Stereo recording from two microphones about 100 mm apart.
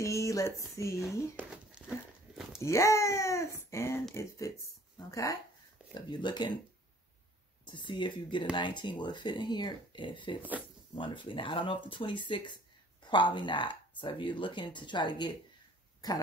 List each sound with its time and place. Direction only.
0.0 s speech: 30° left (ahead or behind)
1.3 s crumpling: 10° right (ahead or behind)
2.6 s speech: 30° left (ahead or behind)
5.9 s speech: 50° left (ahead or behind)
7.6 s speech: 50° left (ahead or behind)